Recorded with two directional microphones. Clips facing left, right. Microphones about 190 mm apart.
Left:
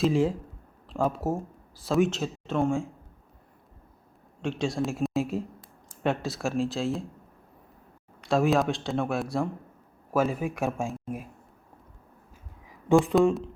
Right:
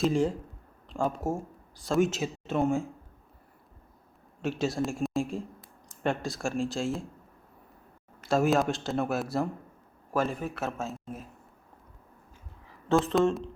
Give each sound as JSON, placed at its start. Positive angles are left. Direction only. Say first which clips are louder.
{"t": 0.0, "sound": "speech", "louder": "left 2 dB", "side_deg": 0}
{"t": 4.4, "sound": "speech", "louder": "left 1 dB", "side_deg": -5}
{"t": 8.2, "sound": "speech", "louder": "left 1 dB", "side_deg": 0}
{"t": 13.1, "sound": "speech", "louder": "left 3 dB", "side_deg": 5}